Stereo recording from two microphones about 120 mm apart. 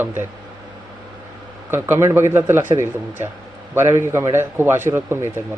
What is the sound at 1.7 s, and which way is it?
A man's voice, 20° right (ahead or behind).